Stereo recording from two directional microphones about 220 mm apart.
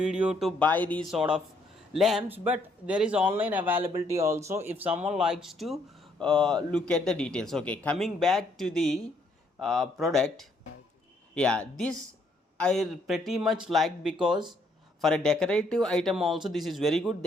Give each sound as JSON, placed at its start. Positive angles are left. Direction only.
{"t": 0.0, "sound": "speech", "side_deg": -5}